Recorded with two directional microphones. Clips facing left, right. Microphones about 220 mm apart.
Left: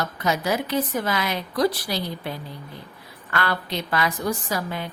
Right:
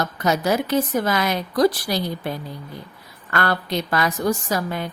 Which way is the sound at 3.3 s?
45° right (ahead or behind).